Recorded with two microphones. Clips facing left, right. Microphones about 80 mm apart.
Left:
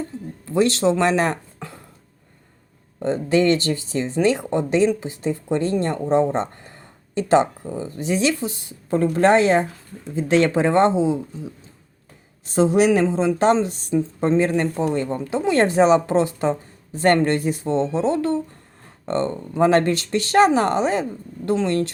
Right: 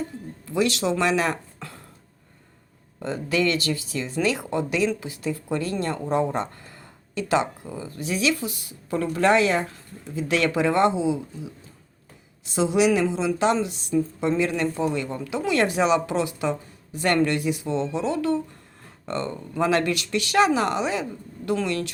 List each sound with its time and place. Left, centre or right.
0.4 s speech: left
3.0 s speech: left
21.5 s speech: left